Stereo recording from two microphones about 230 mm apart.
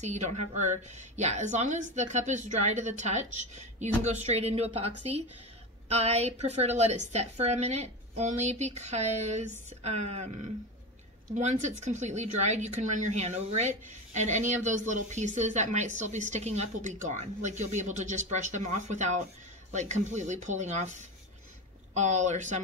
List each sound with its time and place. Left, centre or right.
0.0 s speech: right
11.3 s speech: right